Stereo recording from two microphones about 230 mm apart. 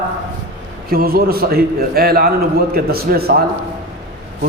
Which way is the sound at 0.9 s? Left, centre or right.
Right.